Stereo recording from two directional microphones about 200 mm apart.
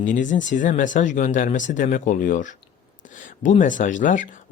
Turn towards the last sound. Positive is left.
turn(degrees=40)  # may be behind; listen again after turning